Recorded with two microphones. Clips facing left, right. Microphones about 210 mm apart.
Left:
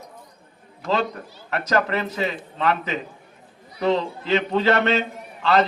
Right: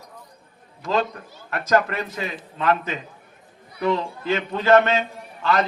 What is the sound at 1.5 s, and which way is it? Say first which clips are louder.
A man's voice: right 1 dB; 45° right (ahead or behind).